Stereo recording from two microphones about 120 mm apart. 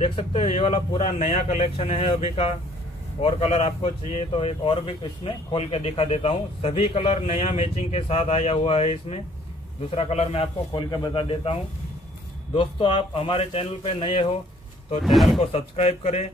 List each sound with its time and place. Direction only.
0.0 s speech: 50° left (ahead or behind)
10.7 s speech: 40° left (ahead or behind)
12.5 s speech: 45° left (ahead or behind)
15.0 s speech: centre (ahead or behind)
15.4 s speech: 65° left (ahead or behind)